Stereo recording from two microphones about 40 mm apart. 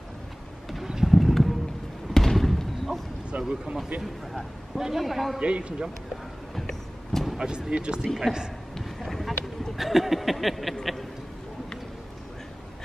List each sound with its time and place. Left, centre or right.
1.0 s a sound: centre
2.1 s basketball bounce: centre
3.3 s a sound: right
4.0 s speech: centre
5.4 s a man's voice: right
6.5 s vehicle: centre
7.3 s a man's voice: right
8.2 s a man's voice: centre
8.7 s a sound: centre
9.8 s speech: centre